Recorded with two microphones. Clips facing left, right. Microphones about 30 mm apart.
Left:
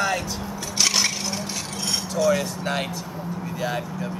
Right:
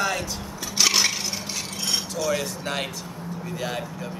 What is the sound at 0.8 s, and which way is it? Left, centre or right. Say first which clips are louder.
Chink: right 1 dB; centre.